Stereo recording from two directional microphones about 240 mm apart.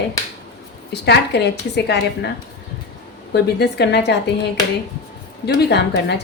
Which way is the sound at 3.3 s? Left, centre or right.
Left.